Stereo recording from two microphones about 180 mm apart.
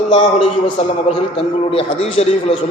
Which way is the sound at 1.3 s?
30° left (ahead or behind).